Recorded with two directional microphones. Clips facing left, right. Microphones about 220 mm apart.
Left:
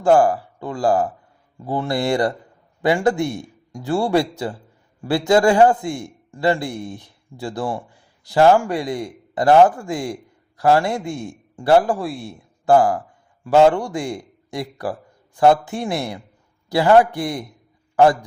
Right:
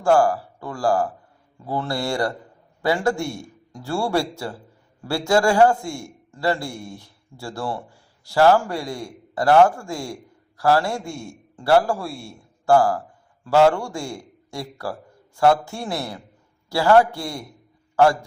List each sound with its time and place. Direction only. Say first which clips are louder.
0.0 s a man's voice: left 3 dB; 20° left (ahead or behind)